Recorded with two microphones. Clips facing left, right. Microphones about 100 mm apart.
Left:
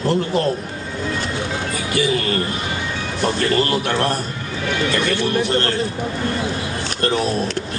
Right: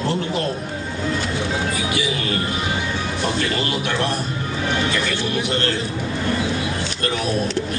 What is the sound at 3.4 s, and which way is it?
Speech, 40° left (ahead or behind).